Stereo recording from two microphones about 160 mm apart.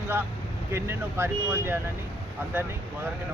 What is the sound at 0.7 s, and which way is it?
Speech, 15° right (ahead or behind).